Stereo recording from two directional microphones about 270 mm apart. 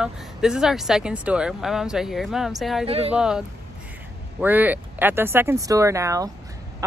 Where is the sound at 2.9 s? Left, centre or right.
Right.